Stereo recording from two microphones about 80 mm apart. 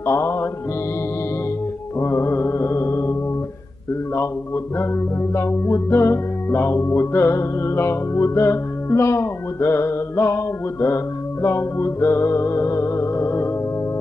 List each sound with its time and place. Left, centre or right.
0.0 s music: left
2.0 s music: left
5.3 s music: left